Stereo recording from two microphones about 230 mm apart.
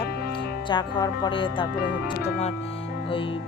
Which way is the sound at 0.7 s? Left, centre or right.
Centre.